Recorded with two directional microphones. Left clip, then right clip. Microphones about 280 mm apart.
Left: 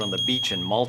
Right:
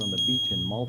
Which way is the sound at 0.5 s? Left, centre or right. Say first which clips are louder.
Left 6 dB; left.